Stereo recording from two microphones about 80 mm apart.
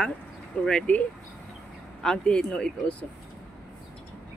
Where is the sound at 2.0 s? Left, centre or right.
Centre.